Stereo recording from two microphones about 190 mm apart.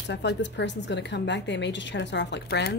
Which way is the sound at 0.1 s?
65° left (ahead or behind).